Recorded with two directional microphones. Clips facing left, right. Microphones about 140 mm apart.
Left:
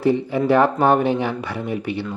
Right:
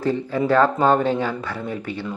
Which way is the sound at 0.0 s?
15° left (ahead or behind).